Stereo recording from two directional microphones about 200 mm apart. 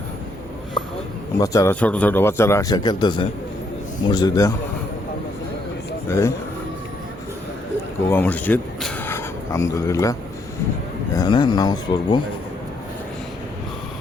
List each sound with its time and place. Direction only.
1.4 s a man's voice: 15° left (ahead or behind)
6.1 s speech: 15° left (ahead or behind)
8.1 s a man's voice: 10° left (ahead or behind)